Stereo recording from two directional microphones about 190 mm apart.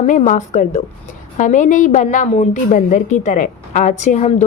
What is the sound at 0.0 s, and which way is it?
A woman's voice, 40° left (ahead or behind).